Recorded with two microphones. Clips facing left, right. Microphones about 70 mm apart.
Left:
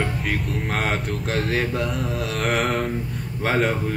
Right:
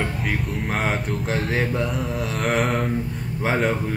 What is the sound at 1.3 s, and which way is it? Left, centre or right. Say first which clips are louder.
Speech: even; centre.